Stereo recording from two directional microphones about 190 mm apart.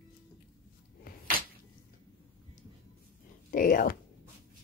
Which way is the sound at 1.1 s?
50° left (ahead or behind).